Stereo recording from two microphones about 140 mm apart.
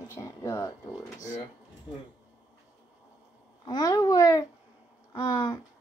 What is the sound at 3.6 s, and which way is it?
A woman's voice, 30° left (ahead or behind).